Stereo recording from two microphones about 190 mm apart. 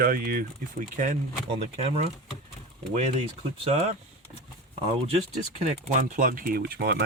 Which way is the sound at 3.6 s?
35° right (ahead or behind).